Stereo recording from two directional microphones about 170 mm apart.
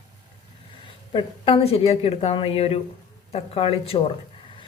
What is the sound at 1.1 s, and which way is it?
A woman's voice, 35° left (ahead or behind).